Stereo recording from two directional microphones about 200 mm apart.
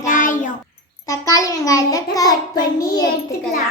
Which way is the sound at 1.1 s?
15° left (ahead or behind).